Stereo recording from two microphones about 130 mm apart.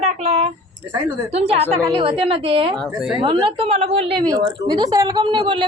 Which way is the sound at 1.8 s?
40° right (ahead or behind).